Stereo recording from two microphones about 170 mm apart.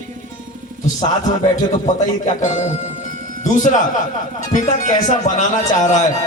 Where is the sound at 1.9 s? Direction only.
45° left (ahead or behind).